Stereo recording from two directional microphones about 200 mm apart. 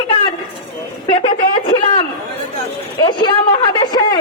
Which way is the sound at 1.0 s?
25° left (ahead or behind).